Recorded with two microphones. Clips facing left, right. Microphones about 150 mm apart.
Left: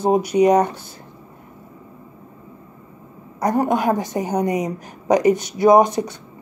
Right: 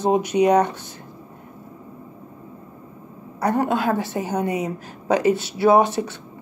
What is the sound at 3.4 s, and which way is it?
Speech, 15° left (ahead or behind).